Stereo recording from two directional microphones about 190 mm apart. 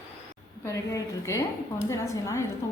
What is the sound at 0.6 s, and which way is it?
A woman's voice, 15° left (ahead or behind).